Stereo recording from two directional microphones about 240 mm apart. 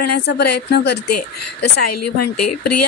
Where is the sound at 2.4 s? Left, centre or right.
Left.